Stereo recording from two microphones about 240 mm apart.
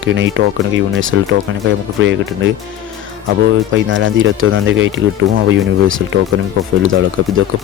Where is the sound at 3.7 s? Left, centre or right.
Right.